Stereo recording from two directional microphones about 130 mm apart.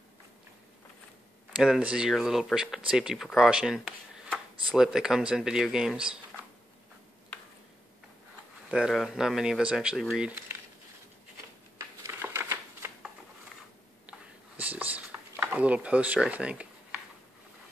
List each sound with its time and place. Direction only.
1.6 s speech: 5° right (ahead or behind)
8.6 s speech: 5° right (ahead or behind)
12.0 s shuffling cards: 20° right (ahead or behind)
14.6 s a sound: 10° right (ahead or behind)